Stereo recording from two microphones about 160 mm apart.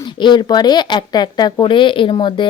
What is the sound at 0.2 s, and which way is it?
Speech, 30° left (ahead or behind).